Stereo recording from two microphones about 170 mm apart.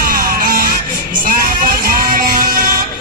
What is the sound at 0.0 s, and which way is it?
Music, 60° right (ahead or behind).